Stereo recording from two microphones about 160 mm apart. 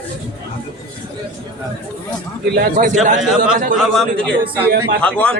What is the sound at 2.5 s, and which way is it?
Speech, 80° right.